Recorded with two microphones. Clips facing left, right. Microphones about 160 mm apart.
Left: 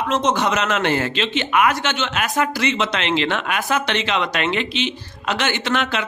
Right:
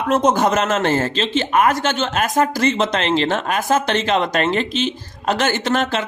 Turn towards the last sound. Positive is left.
turn(degrees=-40)  # may be behind; listen again after turning